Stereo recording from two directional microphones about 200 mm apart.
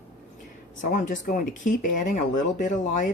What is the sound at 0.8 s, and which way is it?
Speech, 40° left (ahead or behind).